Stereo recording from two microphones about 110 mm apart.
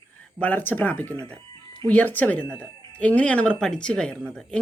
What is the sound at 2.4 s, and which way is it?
Speech, 15° right (ahead or behind).